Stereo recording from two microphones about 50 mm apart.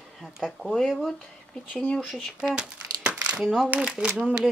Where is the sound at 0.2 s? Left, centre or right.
Centre.